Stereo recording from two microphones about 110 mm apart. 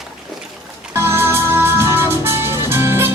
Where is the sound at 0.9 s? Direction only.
25° right (ahead or behind).